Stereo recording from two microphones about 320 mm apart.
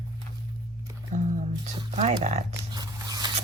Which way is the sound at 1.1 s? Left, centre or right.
Right.